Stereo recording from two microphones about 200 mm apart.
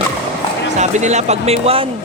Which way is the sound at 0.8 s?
35° right (ahead or behind).